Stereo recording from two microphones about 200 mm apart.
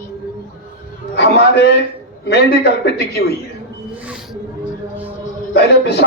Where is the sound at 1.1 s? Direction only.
55° left (ahead or behind).